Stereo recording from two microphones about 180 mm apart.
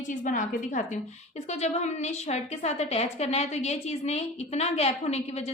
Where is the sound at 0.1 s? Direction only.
45° left (ahead or behind).